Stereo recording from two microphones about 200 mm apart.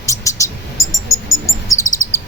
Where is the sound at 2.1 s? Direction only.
15° left (ahead or behind).